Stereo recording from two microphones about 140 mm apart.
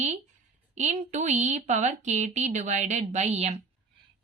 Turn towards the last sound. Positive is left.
turn(degrees=-50)  # may be behind; listen again after turning